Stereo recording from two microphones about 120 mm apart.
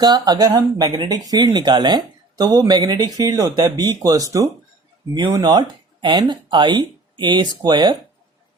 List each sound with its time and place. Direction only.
0.0 s speech: 35° right (ahead or behind)